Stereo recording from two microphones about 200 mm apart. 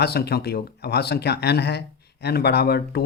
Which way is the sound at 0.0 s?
50° left (ahead or behind).